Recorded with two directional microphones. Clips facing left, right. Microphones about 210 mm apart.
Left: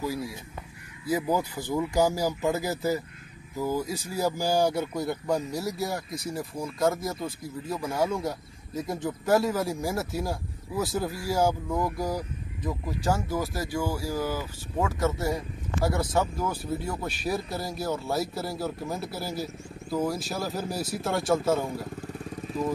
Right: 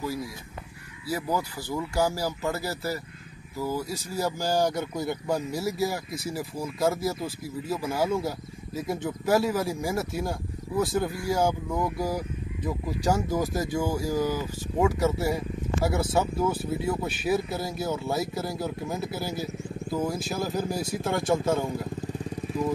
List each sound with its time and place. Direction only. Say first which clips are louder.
0.0 s speech: left 1 dB; 10° left (ahead or behind)